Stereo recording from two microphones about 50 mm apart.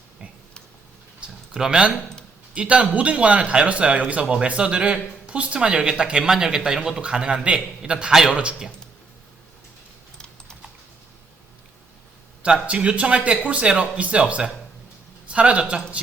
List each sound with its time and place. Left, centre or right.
1.2 s a sound: centre
2.6 s a man's voice: right
12.6 s a man's voice: right